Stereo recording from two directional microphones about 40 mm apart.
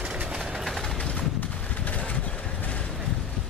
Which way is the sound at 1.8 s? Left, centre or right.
Left.